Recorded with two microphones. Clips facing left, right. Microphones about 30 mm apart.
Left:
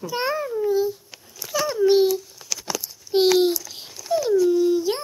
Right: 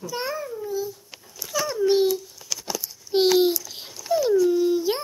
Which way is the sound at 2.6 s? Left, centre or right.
Centre.